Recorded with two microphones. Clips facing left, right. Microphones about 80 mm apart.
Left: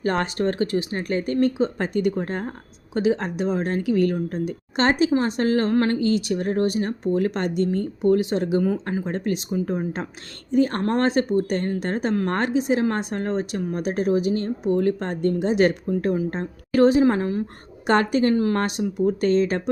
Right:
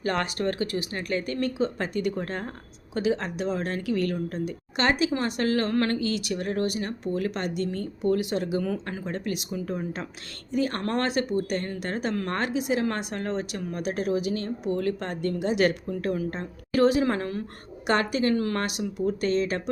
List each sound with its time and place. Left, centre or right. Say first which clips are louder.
0.0 s a woman's voice: left 4 dB; left
8.6 s a woman's voice: left 7 dB; centre
9.0 s a woman's voice: left 5 dB; left
17.8 s a woman's voice: left 5 dB; left